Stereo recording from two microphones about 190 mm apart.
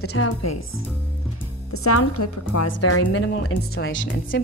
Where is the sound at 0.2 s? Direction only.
90° left.